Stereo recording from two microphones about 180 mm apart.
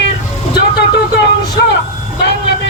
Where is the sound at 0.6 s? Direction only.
65° left (ahead or behind).